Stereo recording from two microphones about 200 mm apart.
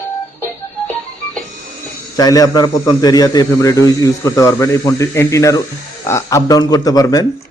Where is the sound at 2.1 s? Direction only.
20° left (ahead or behind).